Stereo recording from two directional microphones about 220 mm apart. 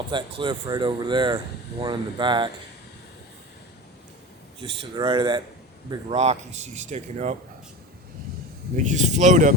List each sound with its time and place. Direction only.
0.1 s speech: 20° right (ahead or behind)
4.6 s speech: 25° right (ahead or behind)
8.7 s speech: 35° right (ahead or behind)